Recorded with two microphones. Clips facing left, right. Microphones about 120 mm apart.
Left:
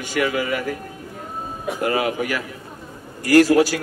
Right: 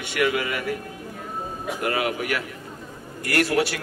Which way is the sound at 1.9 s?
30° left (ahead or behind).